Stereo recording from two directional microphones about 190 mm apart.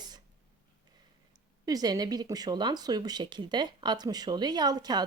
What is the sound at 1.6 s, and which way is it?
Speech, 20° right (ahead or behind).